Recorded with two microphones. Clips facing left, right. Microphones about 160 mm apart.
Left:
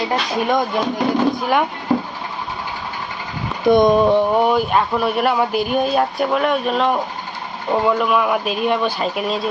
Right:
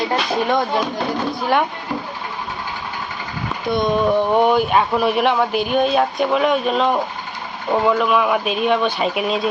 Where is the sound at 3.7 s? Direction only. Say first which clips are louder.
Left 7 dB; 50° left (ahead or behind).